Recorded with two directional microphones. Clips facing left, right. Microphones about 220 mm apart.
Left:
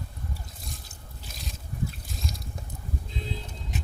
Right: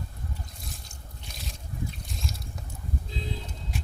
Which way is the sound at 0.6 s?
Centre (ahead or behind).